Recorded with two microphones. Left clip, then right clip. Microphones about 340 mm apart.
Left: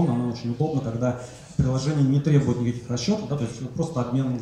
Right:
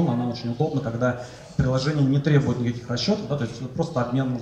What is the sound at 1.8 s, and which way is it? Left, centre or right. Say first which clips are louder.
Speech: even; right.